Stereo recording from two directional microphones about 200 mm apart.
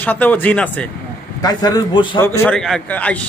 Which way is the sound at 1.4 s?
20° left (ahead or behind).